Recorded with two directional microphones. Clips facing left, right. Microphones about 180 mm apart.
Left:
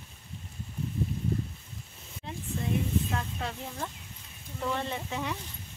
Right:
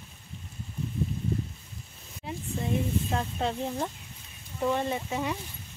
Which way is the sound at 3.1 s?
30° right (ahead or behind).